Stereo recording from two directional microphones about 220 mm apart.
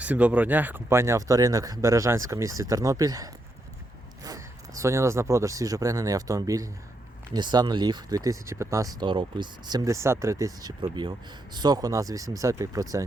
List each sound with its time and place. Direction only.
0.0 s speech: 5° right (ahead or behind)